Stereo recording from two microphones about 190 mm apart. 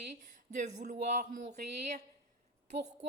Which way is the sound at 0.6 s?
35° right (ahead or behind).